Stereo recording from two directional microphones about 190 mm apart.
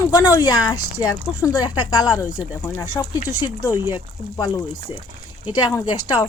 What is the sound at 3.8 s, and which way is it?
Speech, 10° right (ahead or behind).